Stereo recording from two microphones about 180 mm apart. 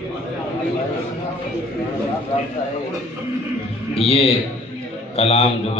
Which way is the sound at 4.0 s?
35° left (ahead or behind).